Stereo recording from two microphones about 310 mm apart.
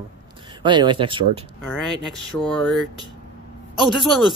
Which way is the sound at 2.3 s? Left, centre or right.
Centre.